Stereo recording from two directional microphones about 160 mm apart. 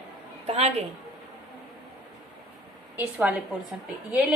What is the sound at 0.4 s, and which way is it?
Speech, 40° right (ahead or behind).